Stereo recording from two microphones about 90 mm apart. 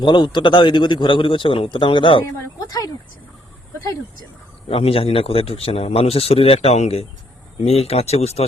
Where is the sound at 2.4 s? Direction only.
45° left (ahead or behind).